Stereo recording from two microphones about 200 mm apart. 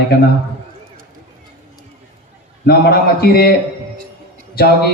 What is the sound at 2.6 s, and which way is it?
Speech, 50° left (ahead or behind).